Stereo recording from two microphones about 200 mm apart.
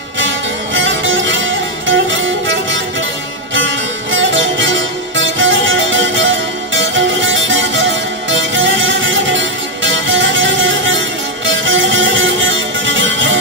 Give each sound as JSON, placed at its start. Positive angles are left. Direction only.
{"t": 0.7, "sound": "music", "side_deg": -70}